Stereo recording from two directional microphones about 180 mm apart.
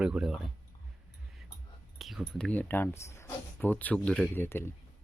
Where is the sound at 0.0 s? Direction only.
5° right (ahead or behind).